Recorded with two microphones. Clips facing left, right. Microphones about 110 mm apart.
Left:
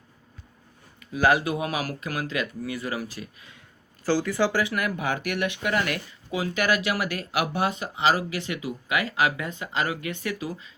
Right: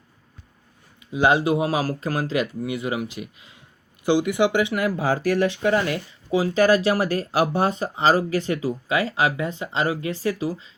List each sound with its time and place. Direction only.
0.9 s speech: 20° right (ahead or behind)